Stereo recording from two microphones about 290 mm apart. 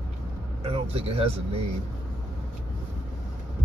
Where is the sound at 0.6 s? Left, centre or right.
Centre.